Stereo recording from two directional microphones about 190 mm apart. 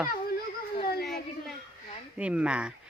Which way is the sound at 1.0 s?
Centre (ahead or behind).